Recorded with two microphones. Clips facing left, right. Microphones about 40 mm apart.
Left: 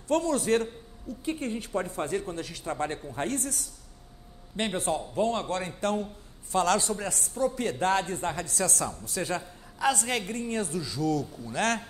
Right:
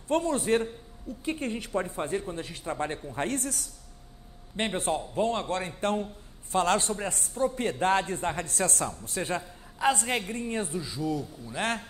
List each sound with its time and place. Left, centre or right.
0.1 s a man's voice: right
3.1 s a man's voice: right